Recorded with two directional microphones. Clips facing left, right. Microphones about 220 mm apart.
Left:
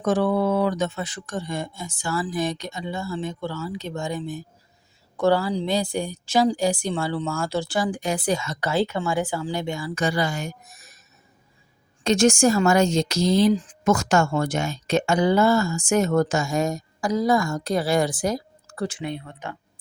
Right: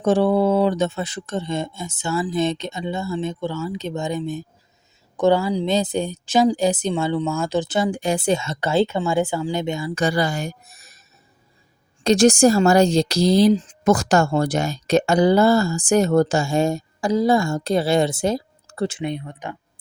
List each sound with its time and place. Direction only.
0.0 s speech: 30° right (ahead or behind)
10.0 s a woman's voice: 35° right (ahead or behind)
12.0 s a woman's voice: 35° right (ahead or behind)
13.5 s speech: 25° right (ahead or behind)